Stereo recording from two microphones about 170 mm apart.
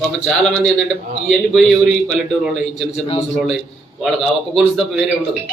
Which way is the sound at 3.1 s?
40° left (ahead or behind).